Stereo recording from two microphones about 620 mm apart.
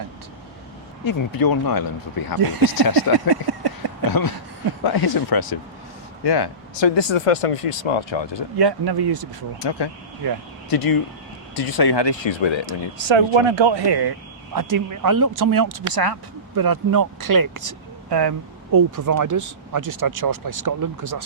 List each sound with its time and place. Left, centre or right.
1.0 s speech: left
2.4 s speech: right
3.1 s speech: left
3.8 s a sound: right
4.8 s speech: left
8.5 s speech: right
9.6 s speech: left
10.2 s speech: right
10.7 s speech: left
13.1 s speech: right